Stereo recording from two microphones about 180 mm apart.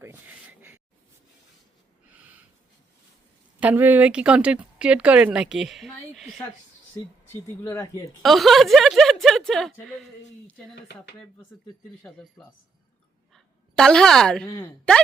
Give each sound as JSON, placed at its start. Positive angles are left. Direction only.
{"t": 0.0, "sound": "a sound", "side_deg": -10}
{"t": 3.6, "sound": "speech", "side_deg": -10}
{"t": 7.6, "sound": "speech", "side_deg": 15}
{"t": 8.2, "sound": "speech", "side_deg": 0}
{"t": 12.0, "sound": "speech", "side_deg": 5}
{"t": 13.3, "sound": "a woman's voice", "side_deg": 5}